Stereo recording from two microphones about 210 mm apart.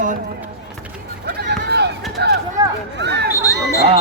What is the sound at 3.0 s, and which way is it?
Speech, 50° right (ahead or behind).